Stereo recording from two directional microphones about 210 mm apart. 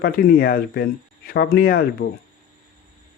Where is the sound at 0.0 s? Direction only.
45° left (ahead or behind).